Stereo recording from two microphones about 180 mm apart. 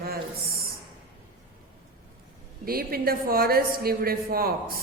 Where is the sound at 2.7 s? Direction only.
55° right (ahead or behind).